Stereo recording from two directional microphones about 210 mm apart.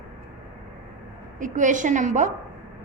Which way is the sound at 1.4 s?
35° right (ahead or behind).